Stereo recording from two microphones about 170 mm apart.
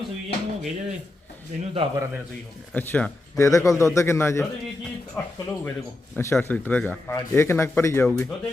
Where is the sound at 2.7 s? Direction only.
10° left (ahead or behind).